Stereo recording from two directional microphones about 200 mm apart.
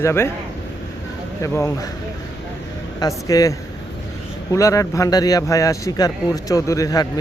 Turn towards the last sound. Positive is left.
turn(degrees=15)  # may be behind; listen again after turning